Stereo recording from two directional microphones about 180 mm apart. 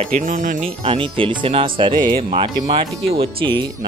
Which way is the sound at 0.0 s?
45° right (ahead or behind).